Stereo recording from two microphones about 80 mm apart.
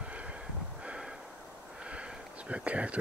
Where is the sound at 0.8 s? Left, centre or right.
Centre.